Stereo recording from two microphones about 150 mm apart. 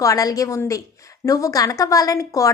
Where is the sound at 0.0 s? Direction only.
25° left (ahead or behind).